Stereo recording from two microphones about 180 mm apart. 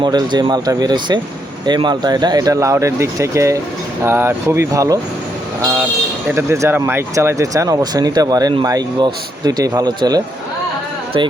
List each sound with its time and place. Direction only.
0.0 s speech: 25° right (ahead or behind)
6.2 s speech: 15° right (ahead or behind)